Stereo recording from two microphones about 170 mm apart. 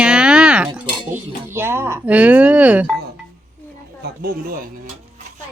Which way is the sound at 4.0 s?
65° right (ahead or behind).